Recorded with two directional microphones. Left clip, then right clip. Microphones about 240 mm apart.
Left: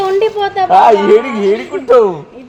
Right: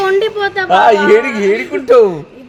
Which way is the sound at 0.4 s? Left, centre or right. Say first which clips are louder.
Left 2 dB; right.